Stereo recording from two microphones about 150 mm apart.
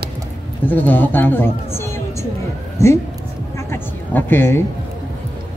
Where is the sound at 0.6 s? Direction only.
15° left (ahead or behind).